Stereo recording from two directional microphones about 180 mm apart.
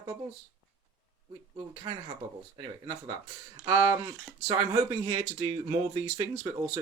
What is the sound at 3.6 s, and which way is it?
Speech, 20° right (ahead or behind).